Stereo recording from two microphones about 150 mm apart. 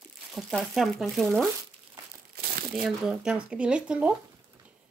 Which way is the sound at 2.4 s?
90° right.